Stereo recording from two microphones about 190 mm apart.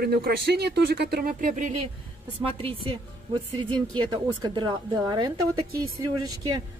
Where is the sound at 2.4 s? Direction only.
30° right (ahead or behind).